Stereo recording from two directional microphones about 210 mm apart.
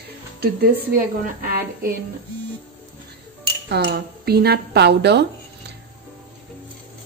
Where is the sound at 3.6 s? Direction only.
50° right (ahead or behind).